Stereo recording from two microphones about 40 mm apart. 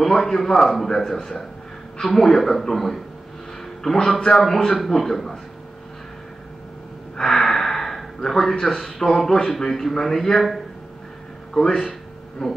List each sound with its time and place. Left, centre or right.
0.0 s a man's voice: centre
7.2 s a man's voice: centre